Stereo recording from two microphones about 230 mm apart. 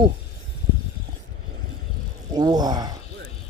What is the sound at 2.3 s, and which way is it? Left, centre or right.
Speech, centre.